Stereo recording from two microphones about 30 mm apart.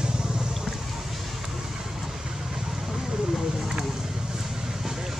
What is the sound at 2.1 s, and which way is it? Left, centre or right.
Vehicle, centre.